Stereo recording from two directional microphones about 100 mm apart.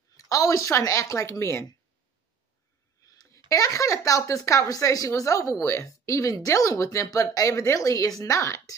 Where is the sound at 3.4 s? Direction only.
35° left (ahead or behind).